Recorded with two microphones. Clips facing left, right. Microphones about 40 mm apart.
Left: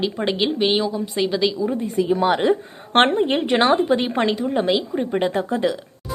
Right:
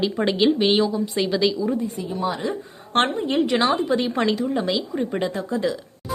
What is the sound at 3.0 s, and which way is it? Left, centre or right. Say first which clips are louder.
A woman's voice: left 3 dB; left.